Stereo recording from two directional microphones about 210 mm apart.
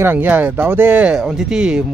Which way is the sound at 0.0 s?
10° right (ahead or behind).